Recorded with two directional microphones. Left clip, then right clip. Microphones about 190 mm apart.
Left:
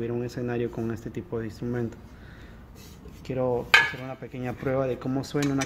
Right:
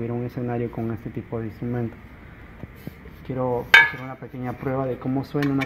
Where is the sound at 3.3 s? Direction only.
5° left (ahead or behind).